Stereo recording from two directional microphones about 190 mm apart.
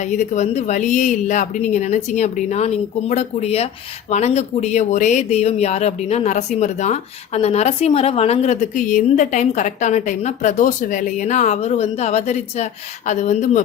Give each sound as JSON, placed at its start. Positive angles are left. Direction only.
{"t": 0.0, "sound": "speech", "side_deg": 40}